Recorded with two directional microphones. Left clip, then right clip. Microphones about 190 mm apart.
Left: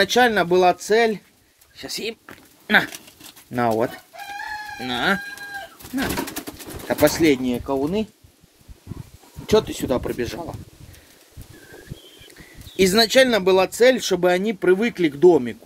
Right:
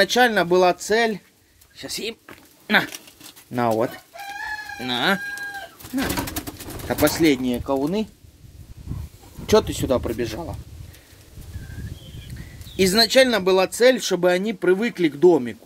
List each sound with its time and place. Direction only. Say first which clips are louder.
0.0 s speech: even; centre (ahead or behind)
4.7 s speech: even; 15° right (ahead or behind)
6.9 s speech: left 2 dB; 10° left (ahead or behind)
7.4 s speech: even; 10° right (ahead or behind)
9.5 s speech: right 1 dB; 20° right (ahead or behind)
9.8 s speech: right 1 dB; 5° right (ahead or behind)
12.7 s speech: left 1 dB; 5° left (ahead or behind)